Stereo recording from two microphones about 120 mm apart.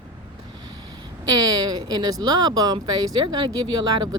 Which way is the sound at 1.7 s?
35° right (ahead or behind).